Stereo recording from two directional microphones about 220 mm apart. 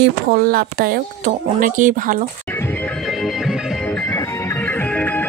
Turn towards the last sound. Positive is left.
turn(degrees=5)  # may be behind; listen again after turning